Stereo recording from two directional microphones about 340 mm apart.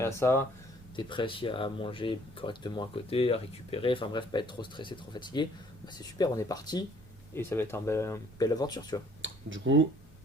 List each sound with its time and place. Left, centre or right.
0.0 s speech: centre
9.2 s speech: right